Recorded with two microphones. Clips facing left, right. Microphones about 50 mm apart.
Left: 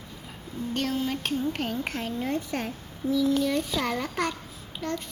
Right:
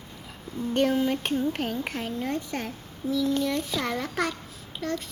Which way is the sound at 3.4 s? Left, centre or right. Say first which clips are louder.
Left 1 dB; centre.